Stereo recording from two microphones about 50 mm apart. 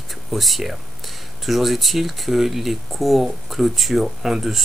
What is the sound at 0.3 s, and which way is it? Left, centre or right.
Speech, centre.